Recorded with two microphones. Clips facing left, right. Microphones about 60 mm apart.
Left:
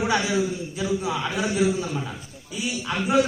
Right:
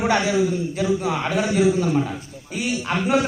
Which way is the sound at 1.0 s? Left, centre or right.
Right.